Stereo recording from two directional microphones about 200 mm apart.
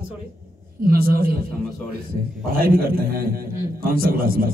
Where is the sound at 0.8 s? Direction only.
50° right (ahead or behind).